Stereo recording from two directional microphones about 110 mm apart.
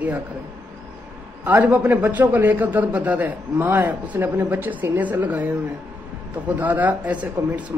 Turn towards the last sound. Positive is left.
turn(degrees=-10)  # may be behind; listen again after turning